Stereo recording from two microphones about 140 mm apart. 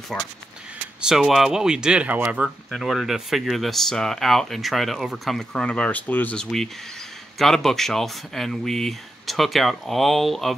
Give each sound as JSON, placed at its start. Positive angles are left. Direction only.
{"t": 0.1, "sound": "speech", "side_deg": 5}